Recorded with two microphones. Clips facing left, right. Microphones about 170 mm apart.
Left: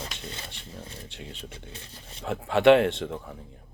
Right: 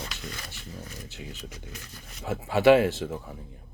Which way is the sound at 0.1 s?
25° left (ahead or behind).